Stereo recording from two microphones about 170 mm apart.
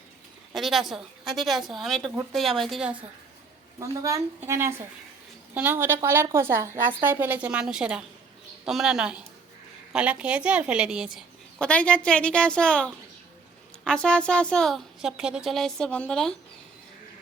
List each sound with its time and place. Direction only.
0.5 s a woman's voice: centre (ahead or behind)
3.8 s a woman's voice: 20° right (ahead or behind)
11.6 s a woman's voice: 5° left (ahead or behind)